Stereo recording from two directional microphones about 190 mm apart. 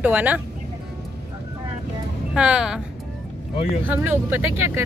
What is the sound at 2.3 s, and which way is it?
Speech, 5° right (ahead or behind).